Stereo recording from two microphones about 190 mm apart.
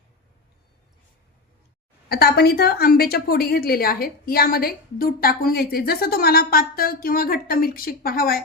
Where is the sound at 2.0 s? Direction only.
55° left (ahead or behind).